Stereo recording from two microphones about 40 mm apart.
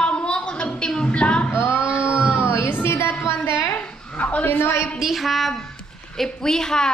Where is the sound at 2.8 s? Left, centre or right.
Left.